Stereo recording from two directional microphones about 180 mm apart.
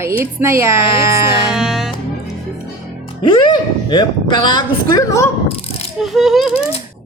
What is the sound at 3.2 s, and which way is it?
Speech, 25° left (ahead or behind).